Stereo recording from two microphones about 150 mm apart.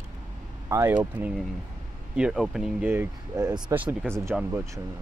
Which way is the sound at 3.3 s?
25° right (ahead or behind).